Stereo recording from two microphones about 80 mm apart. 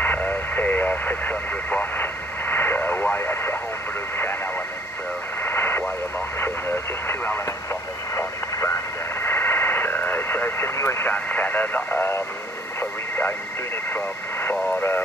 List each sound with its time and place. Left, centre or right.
0.0 s vehicle: left
5.4 s radio: left
13.9 s speech: centre